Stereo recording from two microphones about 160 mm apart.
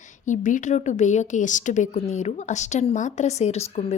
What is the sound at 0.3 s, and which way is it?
A woman's voice, 50° left (ahead or behind).